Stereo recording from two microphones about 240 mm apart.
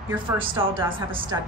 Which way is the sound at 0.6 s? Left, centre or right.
Centre.